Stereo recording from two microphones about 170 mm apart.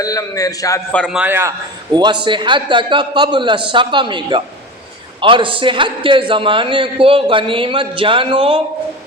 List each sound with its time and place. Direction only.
0.0 s a man's voice: 20° left (ahead or behind)
0.9 s a man's voice: 5° left (ahead or behind)
1.2 s a man's voice: 15° right (ahead or behind)
1.9 s a man's voice: 25° right (ahead or behind)